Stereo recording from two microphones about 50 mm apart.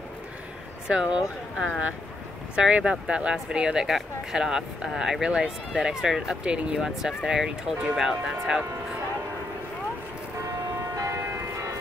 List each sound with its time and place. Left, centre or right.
0.8 s speech: right
2.5 s speech: right
11.1 s church bell: right